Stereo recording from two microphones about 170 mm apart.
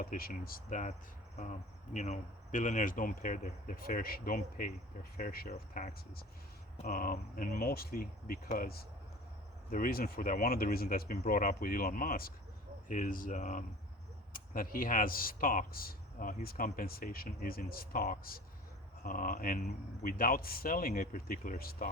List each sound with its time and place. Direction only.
0.0 s speech: 60° left (ahead or behind)
5.5 s speech: 45° left (ahead or behind)
6.8 s speech: 60° left (ahead or behind)